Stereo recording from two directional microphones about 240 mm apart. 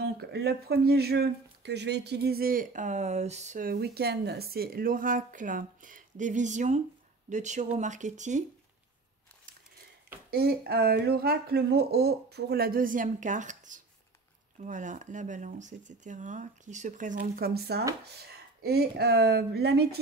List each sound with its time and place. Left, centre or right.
0.0 s speech: right
10.3 s speech: right